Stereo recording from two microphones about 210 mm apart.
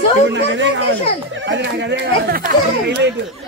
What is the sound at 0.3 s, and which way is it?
Speech, 60° right (ahead or behind).